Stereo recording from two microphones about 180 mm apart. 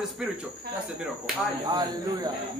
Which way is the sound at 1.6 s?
20° right (ahead or behind).